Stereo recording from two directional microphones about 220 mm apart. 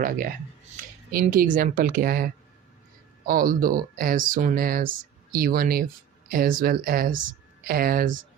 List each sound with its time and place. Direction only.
1.1 s speech: 40° right (ahead or behind)